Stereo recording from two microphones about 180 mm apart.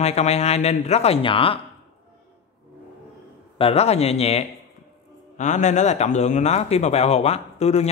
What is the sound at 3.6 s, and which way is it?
A man's voice, 35° left (ahead or behind).